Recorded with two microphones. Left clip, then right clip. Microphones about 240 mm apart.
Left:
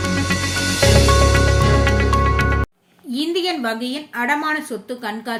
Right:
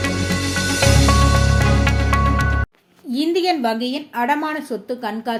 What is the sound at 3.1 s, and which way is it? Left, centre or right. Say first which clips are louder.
A woman's voice: right 3 dB; centre.